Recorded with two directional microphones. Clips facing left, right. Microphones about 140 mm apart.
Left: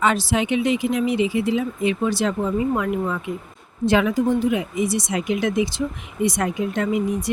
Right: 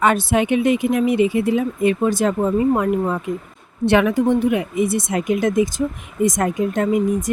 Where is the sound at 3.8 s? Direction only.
65° right (ahead or behind).